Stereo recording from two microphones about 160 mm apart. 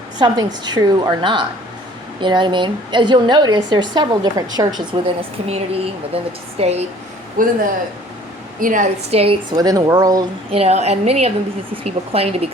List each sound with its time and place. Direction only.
0.2 s a woman's voice: 25° right (ahead or behind)
5.0 s a woman's voice: 35° right (ahead or behind)
7.4 s speech: 60° right (ahead or behind)
8.6 s a woman's voice: 55° right (ahead or behind)
9.0 s a woman's voice: 35° right (ahead or behind)
9.6 s a woman's voice: 25° right (ahead or behind)
10.5 s a woman's voice: 40° right (ahead or behind)